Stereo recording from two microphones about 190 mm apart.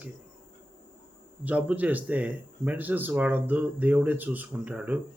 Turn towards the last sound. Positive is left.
turn(degrees=-5)  # may be behind; listen again after turning